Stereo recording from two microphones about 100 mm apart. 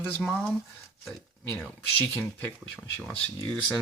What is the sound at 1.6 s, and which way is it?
Speech, 15° left (ahead or behind).